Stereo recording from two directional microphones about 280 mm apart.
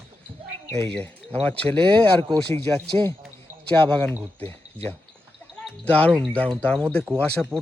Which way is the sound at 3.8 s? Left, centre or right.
Centre.